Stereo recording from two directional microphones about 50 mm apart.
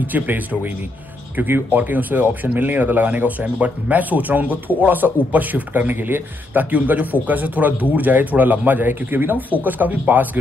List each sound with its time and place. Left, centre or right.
0.0 s speech: right